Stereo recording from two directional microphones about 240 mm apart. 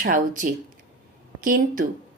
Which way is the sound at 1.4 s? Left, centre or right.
Right.